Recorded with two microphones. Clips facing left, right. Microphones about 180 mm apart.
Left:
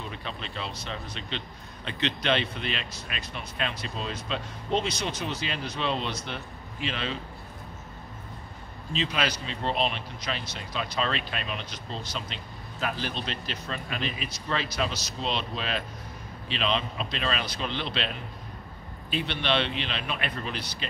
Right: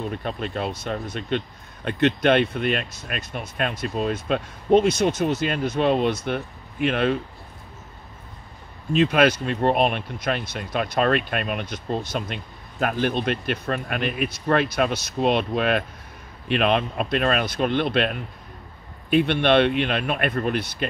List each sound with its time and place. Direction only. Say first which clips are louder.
0.0 s speech: right 9 dB; 50° right (ahead or behind)
8.9 s speech: right 11 dB; 55° right (ahead or behind)